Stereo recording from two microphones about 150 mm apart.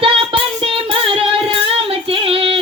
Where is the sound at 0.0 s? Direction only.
35° right (ahead or behind).